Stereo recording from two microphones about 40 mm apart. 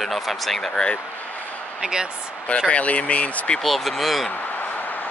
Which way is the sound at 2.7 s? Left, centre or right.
Left.